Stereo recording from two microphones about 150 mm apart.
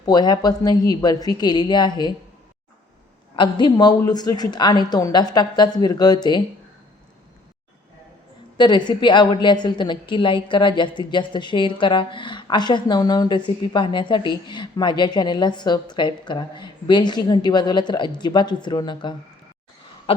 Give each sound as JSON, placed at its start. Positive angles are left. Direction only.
{"t": 0.0, "sound": "a woman's voice", "side_deg": 30}
{"t": 3.3, "sound": "a woman's voice", "side_deg": 30}
{"t": 8.5, "sound": "a woman's voice", "side_deg": 30}
{"t": 20.1, "sound": "a sound", "side_deg": 40}